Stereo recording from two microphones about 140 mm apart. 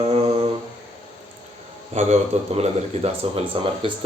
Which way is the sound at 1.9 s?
50° right (ahead or behind).